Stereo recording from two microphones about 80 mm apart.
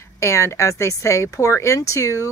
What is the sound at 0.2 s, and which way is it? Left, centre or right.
Speech, left.